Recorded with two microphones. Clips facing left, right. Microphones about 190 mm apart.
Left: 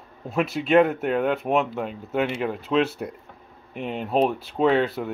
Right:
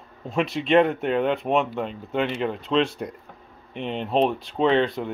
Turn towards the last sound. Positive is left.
turn(degrees=5)  # may be behind; listen again after turning